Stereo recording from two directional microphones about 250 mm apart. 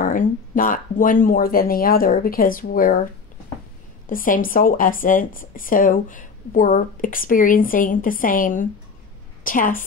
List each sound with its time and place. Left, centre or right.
0.0 s speech: left
4.1 s a woman's voice: left